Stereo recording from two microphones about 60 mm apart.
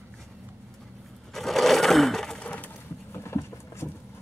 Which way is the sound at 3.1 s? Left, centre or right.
Left.